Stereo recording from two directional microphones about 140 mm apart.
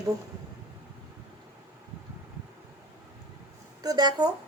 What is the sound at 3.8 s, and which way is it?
Speech, 30° right (ahead or behind).